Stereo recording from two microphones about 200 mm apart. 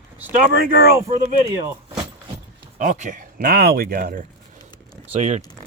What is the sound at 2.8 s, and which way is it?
Speech, 40° right (ahead or behind).